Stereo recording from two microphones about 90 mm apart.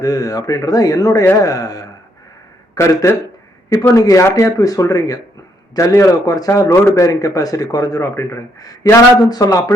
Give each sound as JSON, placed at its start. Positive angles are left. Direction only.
{"t": 0.0, "sound": "a man's voice", "side_deg": 45}